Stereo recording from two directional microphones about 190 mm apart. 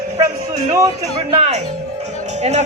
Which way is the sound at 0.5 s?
20° right (ahead or behind).